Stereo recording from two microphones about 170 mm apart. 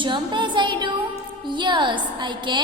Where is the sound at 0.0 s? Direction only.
30° right (ahead or behind).